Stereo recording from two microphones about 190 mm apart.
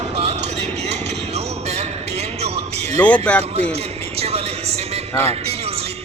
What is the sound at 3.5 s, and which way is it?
Speech, 35° right (ahead or behind).